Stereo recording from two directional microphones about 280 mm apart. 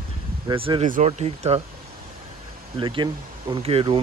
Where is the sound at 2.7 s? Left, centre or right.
Centre.